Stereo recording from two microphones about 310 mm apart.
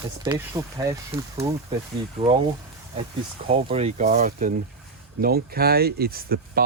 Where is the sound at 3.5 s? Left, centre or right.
Centre.